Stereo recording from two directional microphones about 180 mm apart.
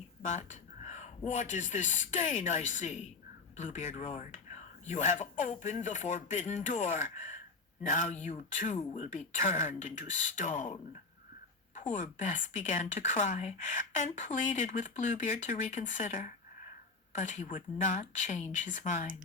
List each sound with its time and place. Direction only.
0.2 s a man's voice: 40° left (ahead or behind)